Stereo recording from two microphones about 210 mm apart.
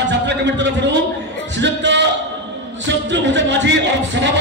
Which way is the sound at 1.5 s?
55° right (ahead or behind).